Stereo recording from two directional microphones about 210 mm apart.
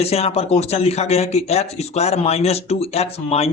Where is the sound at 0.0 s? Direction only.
30° left (ahead or behind).